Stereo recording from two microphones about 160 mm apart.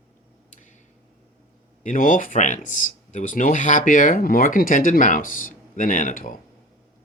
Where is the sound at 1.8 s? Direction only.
55° left (ahead or behind).